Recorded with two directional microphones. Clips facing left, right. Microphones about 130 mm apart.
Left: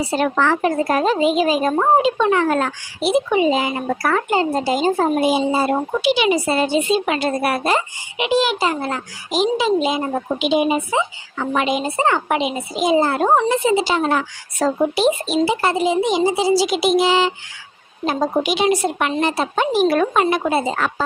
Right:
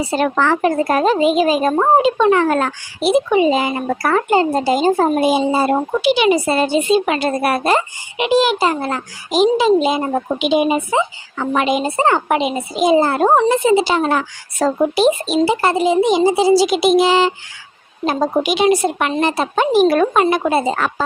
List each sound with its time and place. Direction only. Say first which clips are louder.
0.2 s speech: right 2 dB; 50° right (ahead or behind)
15.4 s a woman's voice: right 4 dB; 45° right (ahead or behind)